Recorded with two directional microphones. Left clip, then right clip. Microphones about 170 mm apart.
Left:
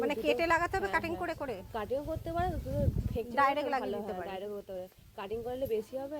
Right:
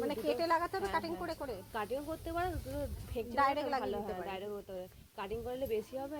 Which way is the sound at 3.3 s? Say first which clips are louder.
Left 3 dB; 25° left (ahead or behind).